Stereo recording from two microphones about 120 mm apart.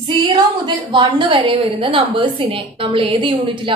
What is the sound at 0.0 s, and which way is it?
A woman's voice, 40° right (ahead or behind).